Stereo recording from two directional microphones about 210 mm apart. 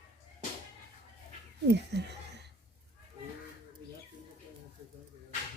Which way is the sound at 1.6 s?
55° right (ahead or behind).